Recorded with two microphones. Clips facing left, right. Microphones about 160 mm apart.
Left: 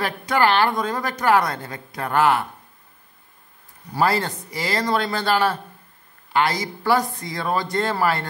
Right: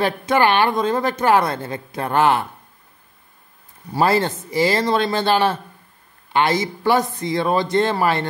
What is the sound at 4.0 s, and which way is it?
Speech, 25° right (ahead or behind).